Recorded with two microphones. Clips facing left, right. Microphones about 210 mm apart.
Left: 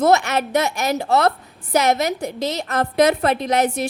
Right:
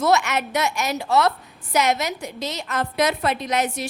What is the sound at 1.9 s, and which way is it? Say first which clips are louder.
A woman's voice: left 4 dB; 55° left (ahead or behind).